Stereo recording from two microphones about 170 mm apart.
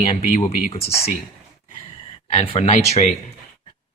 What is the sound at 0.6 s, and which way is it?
Speech, 35° left (ahead or behind).